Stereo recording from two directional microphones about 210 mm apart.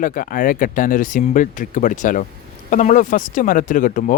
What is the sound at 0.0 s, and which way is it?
Speech, 40° left (ahead or behind).